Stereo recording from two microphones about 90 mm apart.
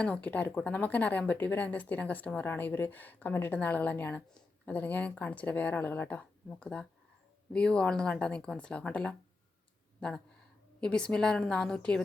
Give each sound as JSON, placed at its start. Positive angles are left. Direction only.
{"t": 0.0, "sound": "a woman's voice", "side_deg": 15}
{"t": 10.8, "sound": "speech", "side_deg": 10}